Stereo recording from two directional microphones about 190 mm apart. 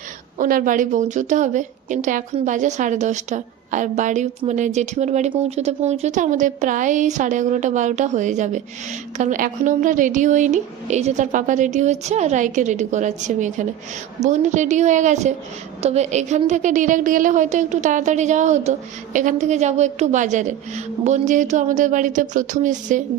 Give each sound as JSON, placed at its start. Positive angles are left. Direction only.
{"t": 0.3, "sound": "a woman's voice", "side_deg": -45}